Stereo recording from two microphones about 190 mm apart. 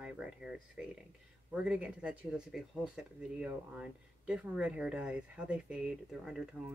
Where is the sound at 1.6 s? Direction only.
5° right (ahead or behind).